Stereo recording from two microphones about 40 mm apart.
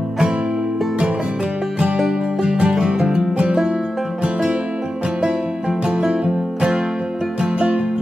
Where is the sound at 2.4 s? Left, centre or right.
Right.